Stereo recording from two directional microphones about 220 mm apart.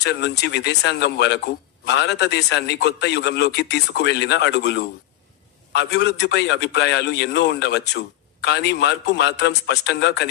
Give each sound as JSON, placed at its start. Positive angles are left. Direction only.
{"t": 0.0, "sound": "a man's voice", "side_deg": 50}